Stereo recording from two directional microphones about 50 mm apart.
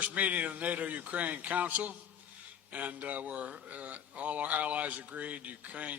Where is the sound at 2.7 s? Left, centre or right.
Right.